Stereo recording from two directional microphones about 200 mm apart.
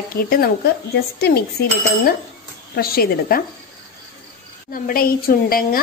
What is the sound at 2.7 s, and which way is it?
Speech, 50° left (ahead or behind).